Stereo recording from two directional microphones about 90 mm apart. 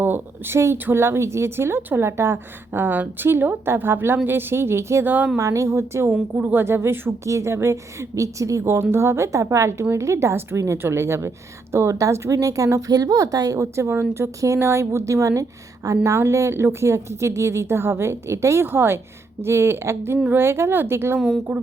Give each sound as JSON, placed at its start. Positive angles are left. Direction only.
{"t": 0.0, "sound": "a woman's voice", "side_deg": -25}